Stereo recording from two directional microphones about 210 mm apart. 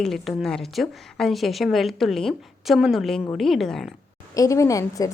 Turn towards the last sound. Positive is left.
turn(degrees=15)  # may be behind; listen again after turning